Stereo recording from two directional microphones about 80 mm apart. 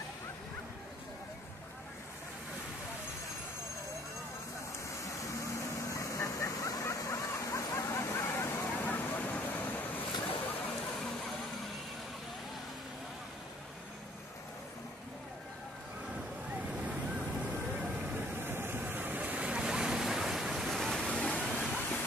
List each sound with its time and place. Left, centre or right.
4.9 s vehicle: left
18.3 s waves: right; by 21.1 s centre
21.1 s waterfall: centre
21.5 s a sound: centre